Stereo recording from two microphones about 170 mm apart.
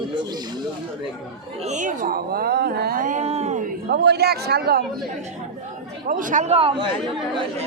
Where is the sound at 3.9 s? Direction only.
75° right (ahead or behind).